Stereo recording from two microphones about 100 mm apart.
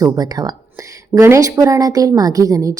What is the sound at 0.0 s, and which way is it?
A woman's voice, 40° right (ahead or behind).